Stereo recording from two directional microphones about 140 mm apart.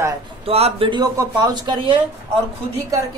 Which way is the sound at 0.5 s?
45° right (ahead or behind).